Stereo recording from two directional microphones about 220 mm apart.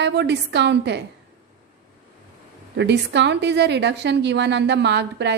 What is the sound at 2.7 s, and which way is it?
A woman's voice, 50° right (ahead or behind).